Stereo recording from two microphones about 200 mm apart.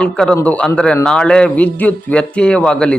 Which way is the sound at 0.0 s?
5° left (ahead or behind).